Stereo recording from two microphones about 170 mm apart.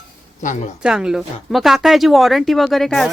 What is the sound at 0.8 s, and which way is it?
Speech, 5° right (ahead or behind).